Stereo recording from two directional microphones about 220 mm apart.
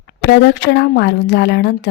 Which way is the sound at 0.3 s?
50° left (ahead or behind).